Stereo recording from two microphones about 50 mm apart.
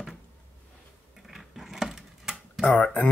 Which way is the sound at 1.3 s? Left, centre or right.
Centre.